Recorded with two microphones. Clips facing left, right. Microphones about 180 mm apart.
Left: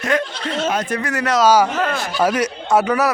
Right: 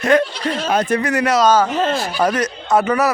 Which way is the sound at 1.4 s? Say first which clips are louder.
Left 2 dB; 10° left (ahead or behind).